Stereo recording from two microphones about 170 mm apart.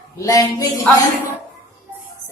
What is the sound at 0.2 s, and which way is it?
Speech, 20° left (ahead or behind).